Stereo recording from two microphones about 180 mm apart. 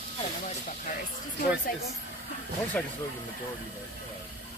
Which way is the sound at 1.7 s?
55° left (ahead or behind).